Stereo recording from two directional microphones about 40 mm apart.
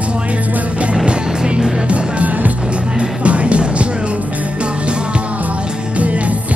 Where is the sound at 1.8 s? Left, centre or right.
Right.